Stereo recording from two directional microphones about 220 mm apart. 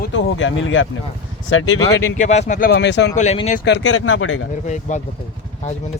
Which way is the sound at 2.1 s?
30° left (ahead or behind).